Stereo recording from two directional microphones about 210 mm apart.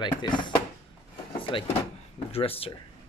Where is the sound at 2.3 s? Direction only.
25° left (ahead or behind).